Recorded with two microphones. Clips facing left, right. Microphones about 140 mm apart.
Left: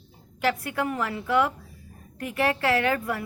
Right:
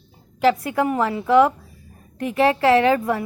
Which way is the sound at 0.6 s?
25° right (ahead or behind).